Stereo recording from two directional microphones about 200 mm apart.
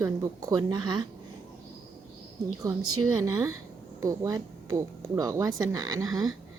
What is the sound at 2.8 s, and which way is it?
Speech, 90° right.